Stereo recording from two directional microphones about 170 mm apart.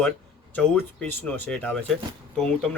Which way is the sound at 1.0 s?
10° left (ahead or behind).